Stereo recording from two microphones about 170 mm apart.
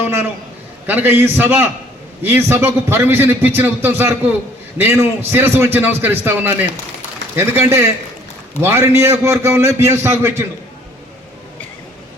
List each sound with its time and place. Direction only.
0.0 s a man's voice: 15° right (ahead or behind)